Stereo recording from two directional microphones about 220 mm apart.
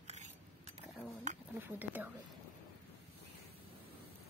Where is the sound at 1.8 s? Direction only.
10° right (ahead or behind).